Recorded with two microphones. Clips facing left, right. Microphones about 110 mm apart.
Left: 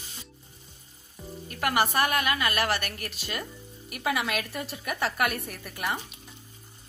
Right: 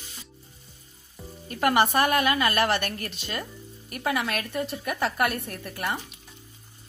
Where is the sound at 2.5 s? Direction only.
5° left (ahead or behind).